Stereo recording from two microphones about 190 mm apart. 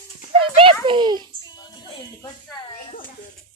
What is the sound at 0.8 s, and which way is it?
Speech, 25° right (ahead or behind).